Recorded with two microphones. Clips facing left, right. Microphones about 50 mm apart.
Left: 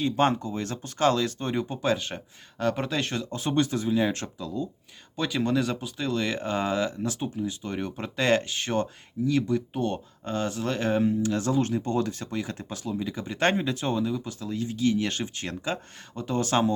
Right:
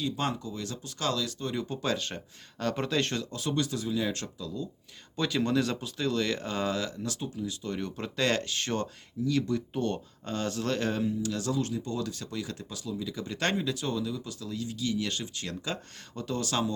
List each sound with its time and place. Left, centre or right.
0.0 s speech: left
1.6 s speech: centre
3.2 s speech: left
5.1 s speech: centre
11.0 s speech: left